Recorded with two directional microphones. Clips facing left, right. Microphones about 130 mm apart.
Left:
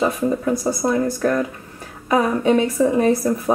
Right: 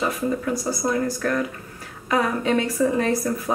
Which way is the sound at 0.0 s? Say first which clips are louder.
Left 4 dB; 25° left (ahead or behind).